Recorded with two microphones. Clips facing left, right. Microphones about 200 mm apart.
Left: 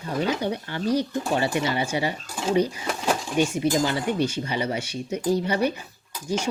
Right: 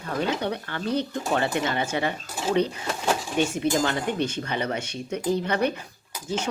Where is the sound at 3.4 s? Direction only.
10° left (ahead or behind).